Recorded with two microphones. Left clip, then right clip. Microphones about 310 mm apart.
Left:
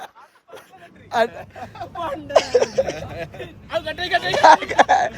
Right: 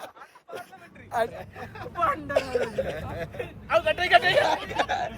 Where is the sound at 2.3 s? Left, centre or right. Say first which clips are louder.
Left 9 dB; left.